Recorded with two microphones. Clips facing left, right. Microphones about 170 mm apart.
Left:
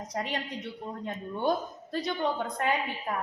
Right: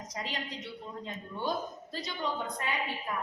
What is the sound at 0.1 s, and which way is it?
A woman's voice, 55° left (ahead or behind).